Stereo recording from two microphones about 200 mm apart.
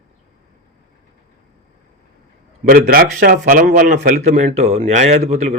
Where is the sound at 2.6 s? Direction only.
45° right (ahead or behind).